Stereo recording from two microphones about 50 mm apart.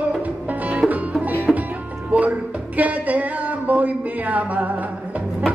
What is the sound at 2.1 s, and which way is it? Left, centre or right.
Speech, right.